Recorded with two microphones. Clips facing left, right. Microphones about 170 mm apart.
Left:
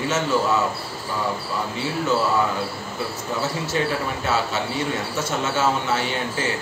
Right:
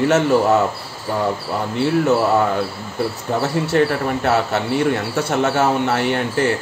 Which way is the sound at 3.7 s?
60° right (ahead or behind).